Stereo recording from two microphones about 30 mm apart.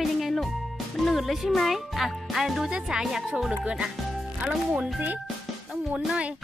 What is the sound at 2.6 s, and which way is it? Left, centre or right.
Speech, right.